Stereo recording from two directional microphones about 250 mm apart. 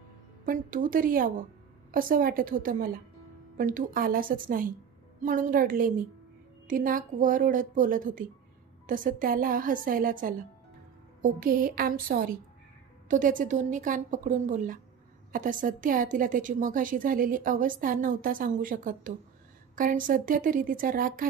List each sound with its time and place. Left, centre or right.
0.5 s a woman's voice: right